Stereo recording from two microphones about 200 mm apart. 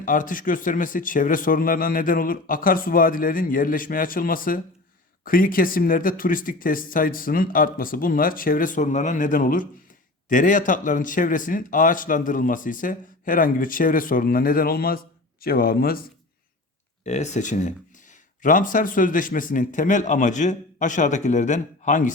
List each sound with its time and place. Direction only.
0.0 s speech: 40° left (ahead or behind)
17.1 s a man's voice: 35° left (ahead or behind)